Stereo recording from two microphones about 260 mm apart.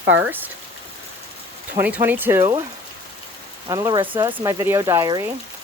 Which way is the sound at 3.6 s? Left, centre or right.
Centre.